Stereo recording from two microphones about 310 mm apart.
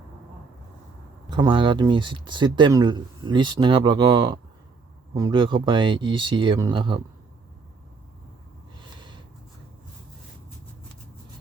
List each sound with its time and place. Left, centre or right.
1.3 s speech: centre